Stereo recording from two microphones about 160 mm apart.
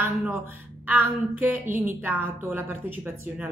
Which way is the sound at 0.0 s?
15° right (ahead or behind).